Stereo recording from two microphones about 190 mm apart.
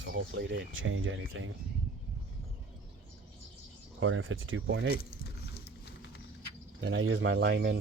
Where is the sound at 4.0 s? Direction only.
90° right; by 5.0 s 70° right (ahead or behind).